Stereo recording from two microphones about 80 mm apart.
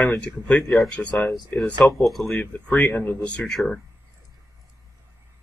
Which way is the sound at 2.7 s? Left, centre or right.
Left.